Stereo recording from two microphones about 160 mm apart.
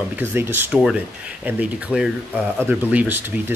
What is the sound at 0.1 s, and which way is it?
Speech, 15° right (ahead or behind).